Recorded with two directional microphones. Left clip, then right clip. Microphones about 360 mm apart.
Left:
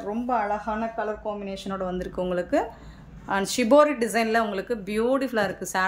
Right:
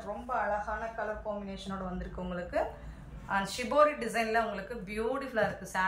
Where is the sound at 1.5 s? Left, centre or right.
Left.